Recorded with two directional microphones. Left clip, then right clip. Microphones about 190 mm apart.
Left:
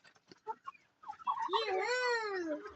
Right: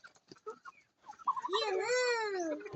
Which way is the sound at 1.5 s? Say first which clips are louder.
Even; 5° left (ahead or behind).